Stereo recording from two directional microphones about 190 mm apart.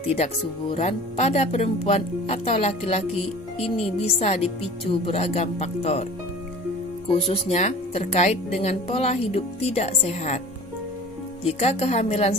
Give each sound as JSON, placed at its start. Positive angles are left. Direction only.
{"t": 0.0, "sound": "speech", "side_deg": 35}
{"t": 7.2, "sound": "speech", "side_deg": 35}
{"t": 11.4, "sound": "speech", "side_deg": 35}